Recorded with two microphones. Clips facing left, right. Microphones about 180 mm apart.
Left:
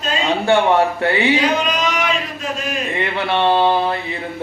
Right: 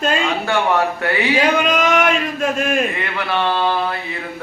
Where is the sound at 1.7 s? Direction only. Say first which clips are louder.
Right 4 dB; 55° right (ahead or behind).